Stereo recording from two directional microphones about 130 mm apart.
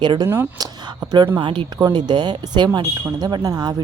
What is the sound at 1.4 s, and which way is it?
A woman's voice, 40° right (ahead or behind).